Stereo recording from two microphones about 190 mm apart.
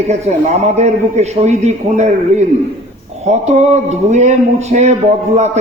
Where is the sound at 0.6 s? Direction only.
35° right (ahead or behind).